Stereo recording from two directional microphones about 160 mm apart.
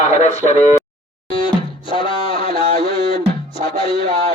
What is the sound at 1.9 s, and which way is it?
Music, 35° left (ahead or behind).